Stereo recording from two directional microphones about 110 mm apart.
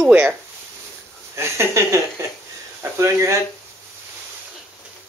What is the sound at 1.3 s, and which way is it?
Speech, 25° right (ahead or behind).